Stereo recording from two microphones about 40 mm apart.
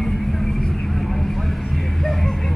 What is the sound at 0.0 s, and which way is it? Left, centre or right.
Vehicle, centre.